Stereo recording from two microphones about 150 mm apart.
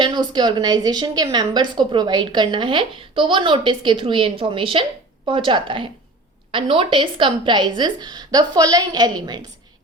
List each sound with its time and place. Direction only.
0.0 s a woman's voice: 30° right (ahead or behind)